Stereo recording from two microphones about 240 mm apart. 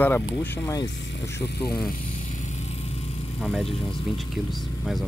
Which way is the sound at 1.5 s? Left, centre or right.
Left.